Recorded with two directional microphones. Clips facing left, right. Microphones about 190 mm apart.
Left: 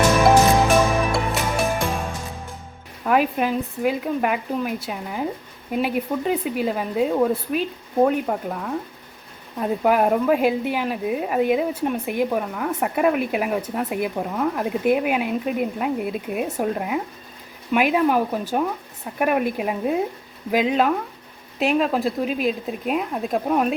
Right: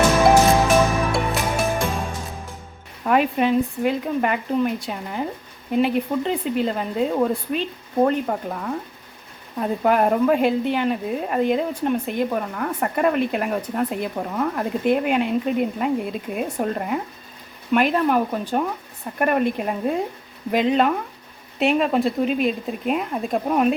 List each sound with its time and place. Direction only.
0.5 s music: 15° left (ahead or behind)
1.1 s music: centre (ahead or behind)
3.0 s speech: centre (ahead or behind)